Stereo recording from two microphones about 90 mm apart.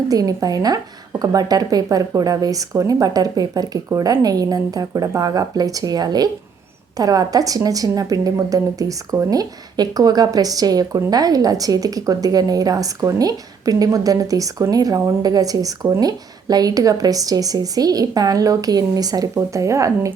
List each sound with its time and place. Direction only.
0.1 s speech: 40° right (ahead or behind)